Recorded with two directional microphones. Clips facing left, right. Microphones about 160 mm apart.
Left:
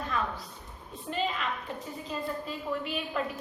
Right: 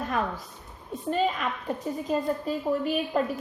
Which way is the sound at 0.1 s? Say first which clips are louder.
Right 4 dB; 50° right (ahead or behind).